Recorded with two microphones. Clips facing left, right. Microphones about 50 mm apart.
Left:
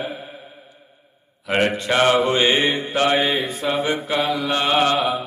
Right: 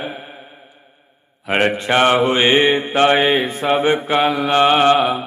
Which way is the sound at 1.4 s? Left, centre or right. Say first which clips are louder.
Right 3 dB; right.